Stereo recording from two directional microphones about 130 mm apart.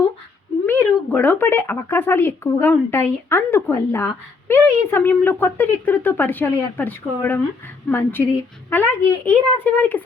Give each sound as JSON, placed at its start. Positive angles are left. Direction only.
{"t": 0.6, "sound": "a woman's voice", "side_deg": 15}